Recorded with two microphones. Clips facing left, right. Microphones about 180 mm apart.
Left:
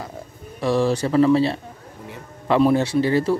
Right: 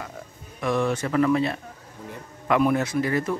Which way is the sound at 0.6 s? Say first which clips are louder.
Left 4 dB; 30° left (ahead or behind).